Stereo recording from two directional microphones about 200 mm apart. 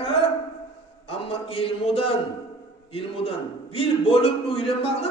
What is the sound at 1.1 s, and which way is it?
A man's voice, 30° left (ahead or behind).